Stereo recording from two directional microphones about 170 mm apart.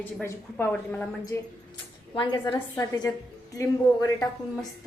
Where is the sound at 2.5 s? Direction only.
15° left (ahead or behind).